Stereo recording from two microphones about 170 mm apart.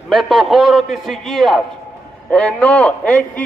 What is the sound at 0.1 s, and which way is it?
A man's voice, centre (ahead or behind).